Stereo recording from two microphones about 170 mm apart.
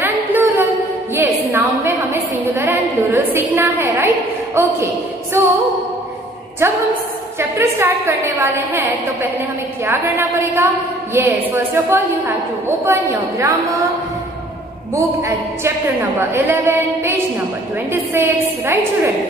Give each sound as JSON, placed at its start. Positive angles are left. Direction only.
{"t": 0.0, "sound": "music", "side_deg": -10}
{"t": 1.1, "sound": "a sound", "side_deg": -15}
{"t": 4.6, "sound": "a woman's voice", "side_deg": -15}
{"t": 6.6, "sound": "a woman's voice", "side_deg": -15}
{"t": 15.2, "sound": "a woman's voice", "side_deg": -15}